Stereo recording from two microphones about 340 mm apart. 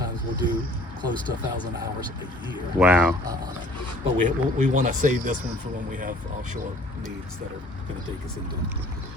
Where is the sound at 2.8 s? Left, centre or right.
Centre.